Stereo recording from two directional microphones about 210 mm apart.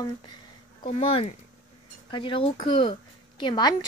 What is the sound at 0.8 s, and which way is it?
Speech, 30° left (ahead or behind).